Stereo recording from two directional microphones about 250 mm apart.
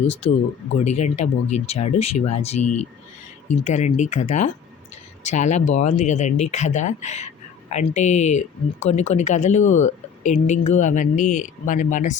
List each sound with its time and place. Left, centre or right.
0.1 s speech: left
3.6 s speech: left